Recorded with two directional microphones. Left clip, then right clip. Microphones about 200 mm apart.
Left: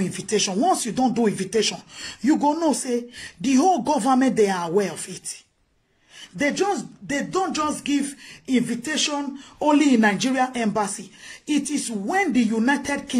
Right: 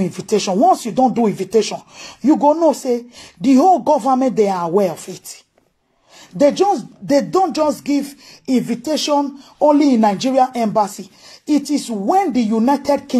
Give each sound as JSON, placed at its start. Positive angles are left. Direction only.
{"t": 0.5, "sound": "speech", "side_deg": -20}
{"t": 6.6, "sound": "speech", "side_deg": -25}